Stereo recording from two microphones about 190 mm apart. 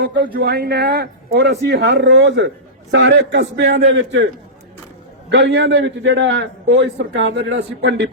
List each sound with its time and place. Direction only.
0.4 s a man's voice: 55° right (ahead or behind); by 4.3 s 75° right (ahead or behind)
5.3 s a man's voice: 65° right (ahead or behind)